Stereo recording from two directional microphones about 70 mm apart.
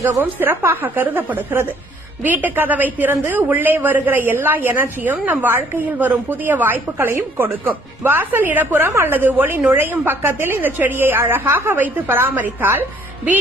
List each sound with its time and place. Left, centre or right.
0.2 s a woman's voice: right